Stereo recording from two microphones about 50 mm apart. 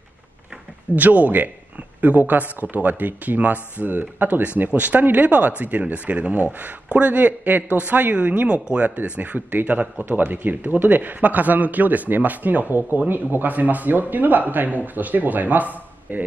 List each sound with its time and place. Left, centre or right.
0.9 s speech: right